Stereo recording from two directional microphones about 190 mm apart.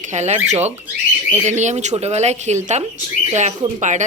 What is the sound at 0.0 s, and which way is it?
Speech, 35° right (ahead or behind).